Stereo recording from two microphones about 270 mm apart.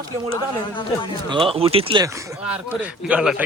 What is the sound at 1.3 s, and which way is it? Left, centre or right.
Speech, centre.